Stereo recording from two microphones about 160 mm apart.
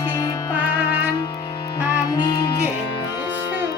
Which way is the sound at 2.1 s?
25° left (ahead or behind).